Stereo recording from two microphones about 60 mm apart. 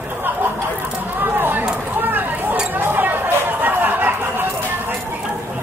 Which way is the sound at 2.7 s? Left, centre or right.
Right.